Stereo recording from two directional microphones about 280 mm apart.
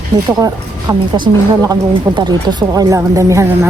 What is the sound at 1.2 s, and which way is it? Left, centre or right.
A woman's voice, centre.